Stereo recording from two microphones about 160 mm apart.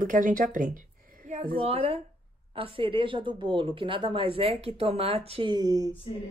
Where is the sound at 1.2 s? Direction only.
50° right (ahead or behind).